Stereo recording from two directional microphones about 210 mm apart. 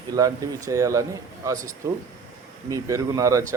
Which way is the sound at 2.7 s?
15° right (ahead or behind).